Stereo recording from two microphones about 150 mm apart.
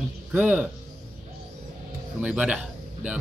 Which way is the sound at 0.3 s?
10° right (ahead or behind).